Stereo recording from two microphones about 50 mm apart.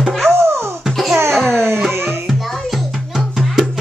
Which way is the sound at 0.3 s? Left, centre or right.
Right.